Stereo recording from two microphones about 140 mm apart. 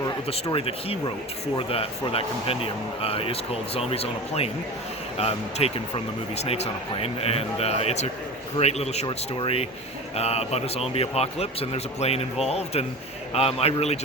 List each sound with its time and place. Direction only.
0.5 s speech: 40° left (ahead or behind)
9.0 s speech: 35° left (ahead or behind)